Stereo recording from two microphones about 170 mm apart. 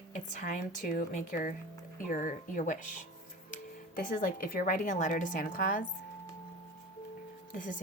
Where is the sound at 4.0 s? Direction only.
55° left (ahead or behind).